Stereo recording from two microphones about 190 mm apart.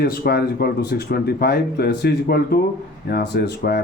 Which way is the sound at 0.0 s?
55° left (ahead or behind).